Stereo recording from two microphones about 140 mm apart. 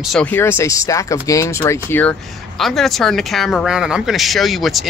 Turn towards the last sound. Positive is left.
turn(degrees=0)  # may be behind; listen again after turning